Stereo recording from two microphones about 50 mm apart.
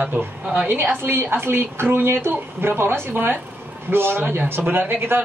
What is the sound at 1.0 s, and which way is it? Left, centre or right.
A man's voice, right.